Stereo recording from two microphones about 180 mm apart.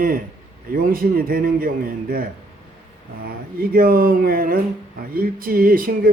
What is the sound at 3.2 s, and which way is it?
Speech, 55° right (ahead or behind).